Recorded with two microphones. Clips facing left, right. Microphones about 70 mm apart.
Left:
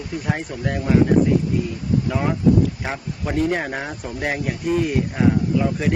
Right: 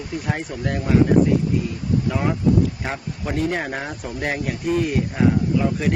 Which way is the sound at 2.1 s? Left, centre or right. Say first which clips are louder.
Left 2 dB; centre.